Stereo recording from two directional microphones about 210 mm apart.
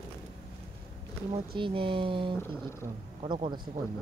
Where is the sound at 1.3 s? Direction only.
25° right (ahead or behind).